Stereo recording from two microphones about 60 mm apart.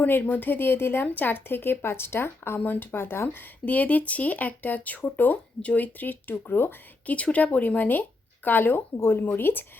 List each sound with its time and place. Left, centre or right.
0.0 s speech: left